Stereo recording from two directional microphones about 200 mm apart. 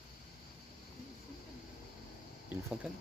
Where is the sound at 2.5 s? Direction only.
10° right (ahead or behind).